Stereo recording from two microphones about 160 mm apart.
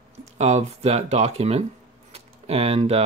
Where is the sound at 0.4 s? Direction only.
45° right (ahead or behind).